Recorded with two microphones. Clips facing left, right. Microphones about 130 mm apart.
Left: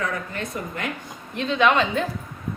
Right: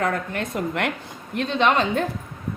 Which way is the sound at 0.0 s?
60° right (ahead or behind).